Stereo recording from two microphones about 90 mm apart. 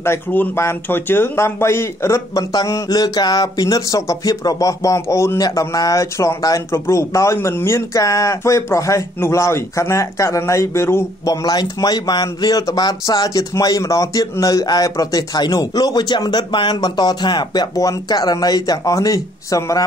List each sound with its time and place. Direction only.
0.0 s speech: 25° left (ahead or behind)
2.5 s speech: 45° left (ahead or behind); by 11.1 s 30° left (ahead or behind)
11.2 s speech: 45° left (ahead or behind)
17.7 s speech: 45° left (ahead or behind)